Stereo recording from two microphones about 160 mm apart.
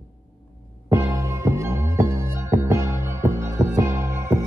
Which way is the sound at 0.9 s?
15° right (ahead or behind).